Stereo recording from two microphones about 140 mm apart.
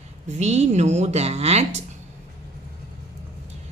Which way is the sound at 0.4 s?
55° right (ahead or behind).